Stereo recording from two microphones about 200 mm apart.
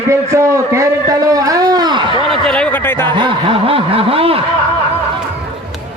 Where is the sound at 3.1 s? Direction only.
25° right (ahead or behind).